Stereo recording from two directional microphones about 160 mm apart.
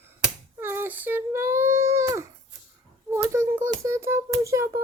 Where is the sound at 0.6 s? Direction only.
15° right (ahead or behind).